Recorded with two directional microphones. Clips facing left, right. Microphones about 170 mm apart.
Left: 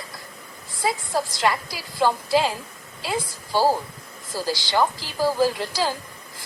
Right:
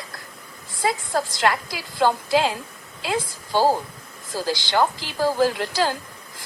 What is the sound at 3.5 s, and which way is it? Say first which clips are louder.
Speech: right 1 dB; 15° right (ahead or behind).